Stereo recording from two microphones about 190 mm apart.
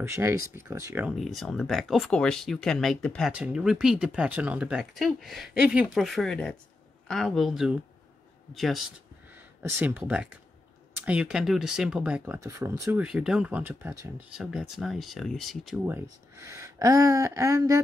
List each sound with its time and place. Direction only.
0.0 s speech: 15° right (ahead or behind)
1.1 s speech: centre (ahead or behind)
9.3 s speech: 10° right (ahead or behind)
12.4 s speech: 15° right (ahead or behind); by 15.8 s centre (ahead or behind)
15.9 s speech: 15° right (ahead or behind)